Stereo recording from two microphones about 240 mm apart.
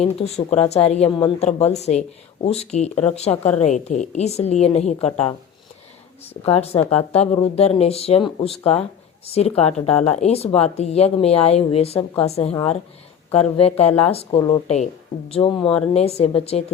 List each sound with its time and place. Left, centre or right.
0.0 s speech: left
6.4 s speech: left